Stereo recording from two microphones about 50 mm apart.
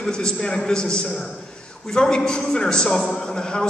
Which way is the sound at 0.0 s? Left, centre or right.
Centre.